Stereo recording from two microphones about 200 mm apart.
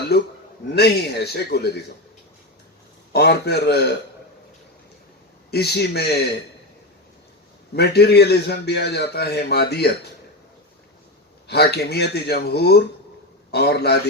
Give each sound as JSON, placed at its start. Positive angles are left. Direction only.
{"t": 0.8, "sound": "speech", "side_deg": 55}
{"t": 3.1, "sound": "a man's voice", "side_deg": 55}
{"t": 5.5, "sound": "a man's voice", "side_deg": 55}
{"t": 7.8, "sound": "a man's voice", "side_deg": 55}
{"t": 11.4, "sound": "a man's voice", "side_deg": 55}